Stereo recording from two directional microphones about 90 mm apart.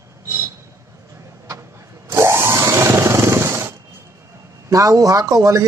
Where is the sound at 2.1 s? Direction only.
30° right (ahead or behind).